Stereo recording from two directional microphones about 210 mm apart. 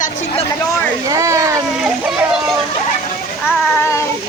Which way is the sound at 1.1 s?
15° right (ahead or behind).